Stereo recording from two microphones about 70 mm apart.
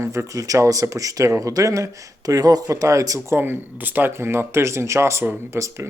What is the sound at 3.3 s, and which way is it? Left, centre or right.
Speech, right.